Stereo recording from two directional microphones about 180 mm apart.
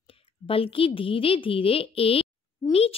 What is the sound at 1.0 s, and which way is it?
A child's voice, 30° left (ahead or behind).